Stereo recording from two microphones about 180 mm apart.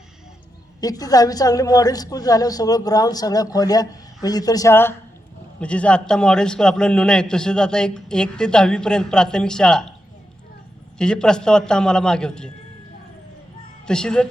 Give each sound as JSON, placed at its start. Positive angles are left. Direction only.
{"t": 0.8, "sound": "a woman's voice", "side_deg": 20}
{"t": 10.9, "sound": "a man's voice", "side_deg": 5}
{"t": 13.8, "sound": "a man's voice", "side_deg": 5}